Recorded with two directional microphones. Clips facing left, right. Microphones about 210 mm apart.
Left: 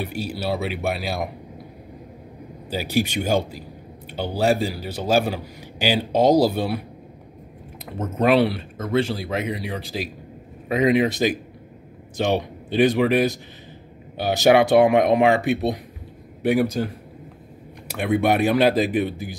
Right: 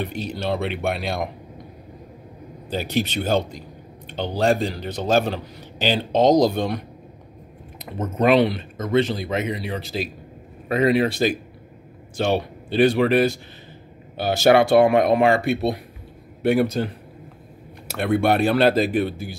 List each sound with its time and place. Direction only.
0.0 s speech: 10° left (ahead or behind)
2.7 s a man's voice: 10° left (ahead or behind)
8.2 s a man's voice: 10° left (ahead or behind)